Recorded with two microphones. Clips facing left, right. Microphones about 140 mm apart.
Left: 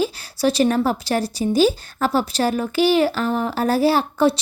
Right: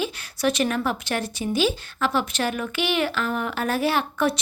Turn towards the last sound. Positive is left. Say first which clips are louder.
# left 5 dB
turn(degrees=30)  # may be behind; listen again after turning